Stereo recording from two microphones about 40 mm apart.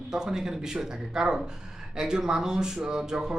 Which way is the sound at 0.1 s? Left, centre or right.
Centre.